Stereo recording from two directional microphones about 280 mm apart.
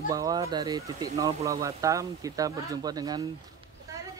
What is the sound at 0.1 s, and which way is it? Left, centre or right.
Speech, centre.